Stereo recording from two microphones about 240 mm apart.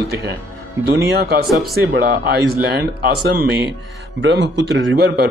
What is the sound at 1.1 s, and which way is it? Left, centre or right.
Speech, right.